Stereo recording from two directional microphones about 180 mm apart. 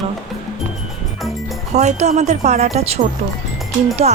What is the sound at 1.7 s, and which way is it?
Speech, 40° right (ahead or behind).